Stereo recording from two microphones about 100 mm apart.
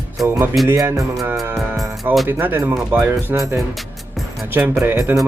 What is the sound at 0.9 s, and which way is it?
Speech, 30° right (ahead or behind).